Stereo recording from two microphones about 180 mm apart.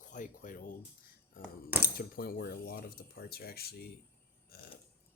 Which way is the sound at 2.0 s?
55° left (ahead or behind).